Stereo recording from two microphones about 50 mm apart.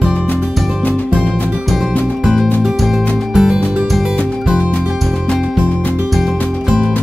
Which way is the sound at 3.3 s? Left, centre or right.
Centre.